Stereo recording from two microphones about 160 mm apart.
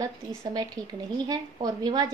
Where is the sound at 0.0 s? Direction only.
20° right (ahead or behind).